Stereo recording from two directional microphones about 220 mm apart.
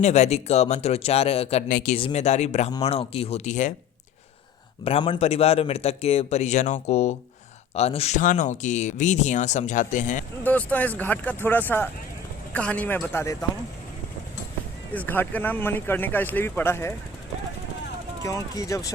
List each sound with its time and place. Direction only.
0.0 s a man's voice: 30° left (ahead or behind)
2.0 s a man's voice: 25° left (ahead or behind)
4.9 s a man's voice: 25° left (ahead or behind)
10.4 s speech: 5° left (ahead or behind)
14.9 s speech: 10° left (ahead or behind)
18.2 s speech: 15° left (ahead or behind)